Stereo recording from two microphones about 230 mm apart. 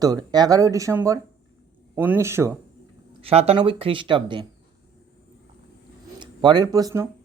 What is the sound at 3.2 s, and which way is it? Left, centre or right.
Speech, right.